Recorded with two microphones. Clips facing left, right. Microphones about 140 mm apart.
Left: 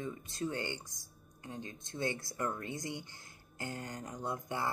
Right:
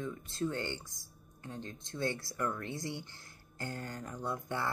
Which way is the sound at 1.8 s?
55° right (ahead or behind).